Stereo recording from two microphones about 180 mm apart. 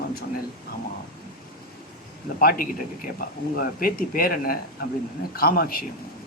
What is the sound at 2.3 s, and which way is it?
Speech, 55° left (ahead or behind).